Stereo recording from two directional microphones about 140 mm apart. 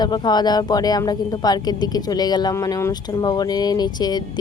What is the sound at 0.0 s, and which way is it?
A woman's voice, 30° left (ahead or behind).